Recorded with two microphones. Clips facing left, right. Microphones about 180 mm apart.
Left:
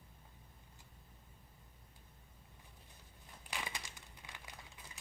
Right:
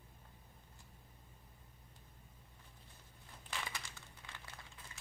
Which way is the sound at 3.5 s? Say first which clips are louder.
Left 1 dB; 15° left (ahead or behind).